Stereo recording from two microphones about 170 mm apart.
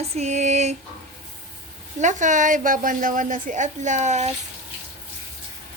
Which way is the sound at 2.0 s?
45° right (ahead or behind).